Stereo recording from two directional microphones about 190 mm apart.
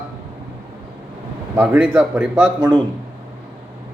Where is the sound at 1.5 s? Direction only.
10° right (ahead or behind).